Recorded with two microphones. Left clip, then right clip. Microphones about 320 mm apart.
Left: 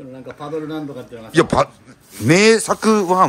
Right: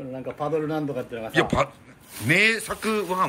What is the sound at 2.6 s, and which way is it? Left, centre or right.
Speech, centre.